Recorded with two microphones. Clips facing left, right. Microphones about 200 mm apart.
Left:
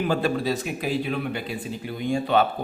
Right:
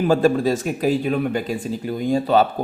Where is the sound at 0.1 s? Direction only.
45° right (ahead or behind).